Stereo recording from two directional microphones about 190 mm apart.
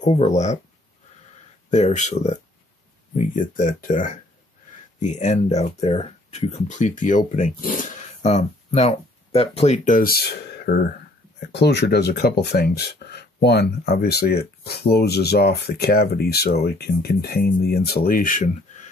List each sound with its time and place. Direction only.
0.0 s speech: 35° left (ahead or behind)
1.7 s speech: 35° left (ahead or behind)
3.3 s speech: 45° left (ahead or behind)